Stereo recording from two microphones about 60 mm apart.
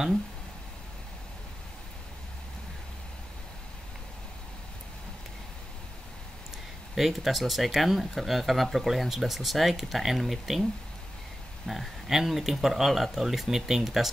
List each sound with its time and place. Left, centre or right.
7.0 s speech: centre